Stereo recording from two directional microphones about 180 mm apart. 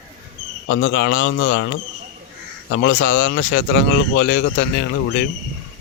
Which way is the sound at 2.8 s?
80° left.